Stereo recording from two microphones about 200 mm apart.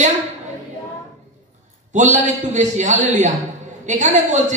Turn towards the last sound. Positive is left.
turn(degrees=-35)  # may be behind; listen again after turning